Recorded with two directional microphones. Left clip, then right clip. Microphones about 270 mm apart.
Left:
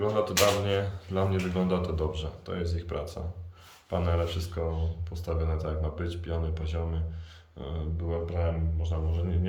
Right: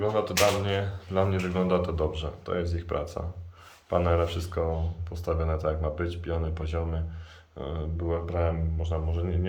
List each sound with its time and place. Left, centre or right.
0.0 s speech: centre